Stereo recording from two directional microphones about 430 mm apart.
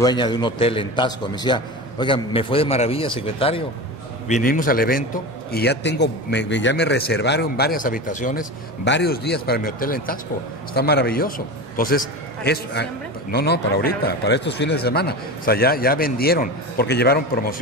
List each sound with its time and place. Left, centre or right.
0.0 s a man's voice: centre